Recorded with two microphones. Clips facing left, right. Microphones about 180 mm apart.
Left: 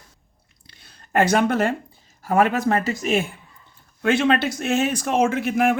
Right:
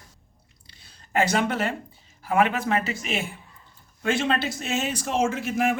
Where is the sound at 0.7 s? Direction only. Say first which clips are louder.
Left 4 dB; 55° left (ahead or behind).